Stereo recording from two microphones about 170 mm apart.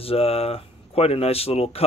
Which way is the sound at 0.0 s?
35° left (ahead or behind).